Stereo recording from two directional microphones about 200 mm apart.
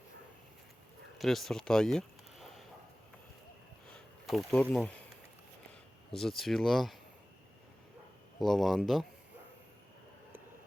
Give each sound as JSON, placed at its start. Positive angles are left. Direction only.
{"t": 1.2, "sound": "speech", "side_deg": 0}
{"t": 4.3, "sound": "speech", "side_deg": 5}
{"t": 6.1, "sound": "speech", "side_deg": 0}
{"t": 8.4, "sound": "speech", "side_deg": 0}